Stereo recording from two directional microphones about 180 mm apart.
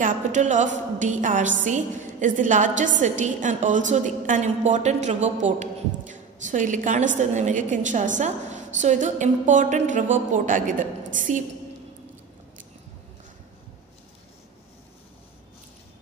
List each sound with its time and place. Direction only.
0.0 s a woman's voice: 45° right (ahead or behind)